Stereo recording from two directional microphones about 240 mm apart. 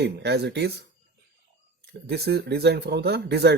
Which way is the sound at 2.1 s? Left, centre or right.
Right.